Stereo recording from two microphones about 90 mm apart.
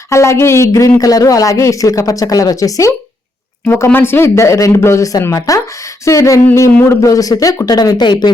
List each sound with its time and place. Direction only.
0.1 s speech: 30° left (ahead or behind)
3.8 s speech: 25° left (ahead or behind); by 8.3 s 55° left (ahead or behind)